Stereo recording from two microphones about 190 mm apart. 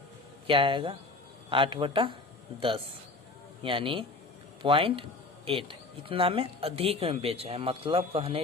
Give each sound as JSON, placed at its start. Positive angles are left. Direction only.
{"t": 0.4, "sound": "speech", "side_deg": -25}